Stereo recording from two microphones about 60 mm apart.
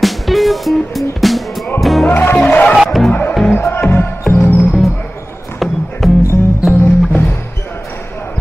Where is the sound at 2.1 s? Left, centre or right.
Left.